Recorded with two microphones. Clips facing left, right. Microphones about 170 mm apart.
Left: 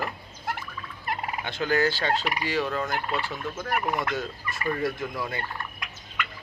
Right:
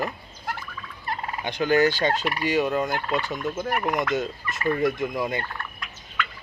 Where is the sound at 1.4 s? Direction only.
20° right (ahead or behind).